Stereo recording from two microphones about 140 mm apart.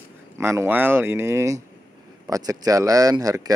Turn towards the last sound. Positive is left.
turn(degrees=-25)  # may be behind; listen again after turning